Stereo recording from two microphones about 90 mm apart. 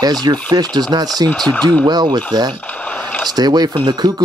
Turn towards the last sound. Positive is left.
turn(degrees=-50)  # may be behind; listen again after turning